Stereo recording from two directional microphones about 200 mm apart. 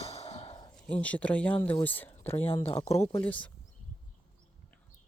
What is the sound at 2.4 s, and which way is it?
Speech, 30° left (ahead or behind).